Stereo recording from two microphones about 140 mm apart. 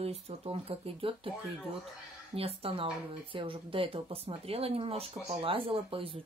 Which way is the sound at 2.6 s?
40° right (ahead or behind).